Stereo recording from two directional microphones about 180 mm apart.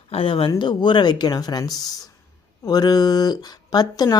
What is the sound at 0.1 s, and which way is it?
Speech, 30° left (ahead or behind).